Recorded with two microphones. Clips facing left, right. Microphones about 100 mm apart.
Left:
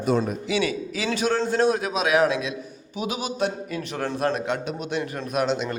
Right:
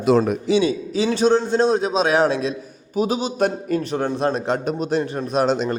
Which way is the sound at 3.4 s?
45° right (ahead or behind).